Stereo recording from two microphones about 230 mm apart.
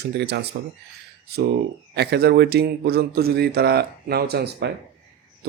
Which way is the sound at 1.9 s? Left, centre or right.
Right.